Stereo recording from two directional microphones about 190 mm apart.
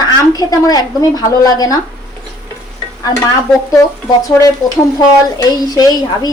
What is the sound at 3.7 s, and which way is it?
A woman's voice, 15° left (ahead or behind).